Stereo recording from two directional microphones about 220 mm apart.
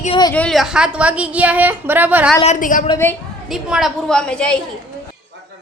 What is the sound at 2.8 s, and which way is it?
Speech, 10° left (ahead or behind).